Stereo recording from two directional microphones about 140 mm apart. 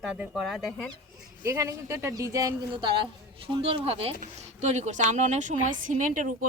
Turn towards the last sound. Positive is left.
turn(degrees=-70)  # may be behind; listen again after turning